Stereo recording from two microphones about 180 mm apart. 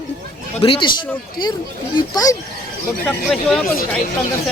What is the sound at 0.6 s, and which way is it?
Speech, 25° left (ahead or behind).